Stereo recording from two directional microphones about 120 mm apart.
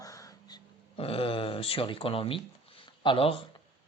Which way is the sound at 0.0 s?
30° left (ahead or behind).